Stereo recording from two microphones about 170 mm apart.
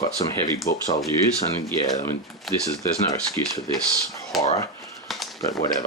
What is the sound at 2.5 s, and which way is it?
Speech, centre (ahead or behind).